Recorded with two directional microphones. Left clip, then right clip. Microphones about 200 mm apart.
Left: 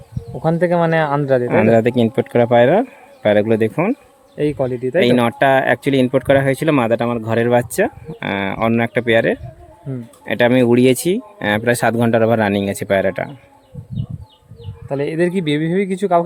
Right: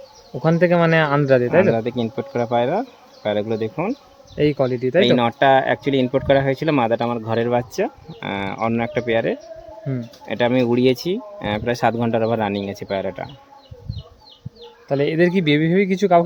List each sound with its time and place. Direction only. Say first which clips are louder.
0.4 s a man's voice: left 1 dB; centre (ahead or behind)
1.5 s speech: left 3 dB; 60° left (ahead or behind)
4.4 s a man's voice: even; centre (ahead or behind)
4.9 s speech: left 2 dB; 40° left (ahead or behind)
14.8 s a man's voice: right 1 dB; centre (ahead or behind)